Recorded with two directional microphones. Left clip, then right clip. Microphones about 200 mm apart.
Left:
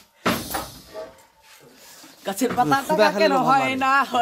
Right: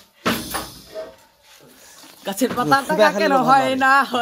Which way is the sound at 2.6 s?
15° right (ahead or behind).